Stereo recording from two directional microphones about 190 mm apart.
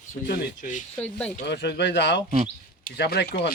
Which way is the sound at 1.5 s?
60° left (ahead or behind).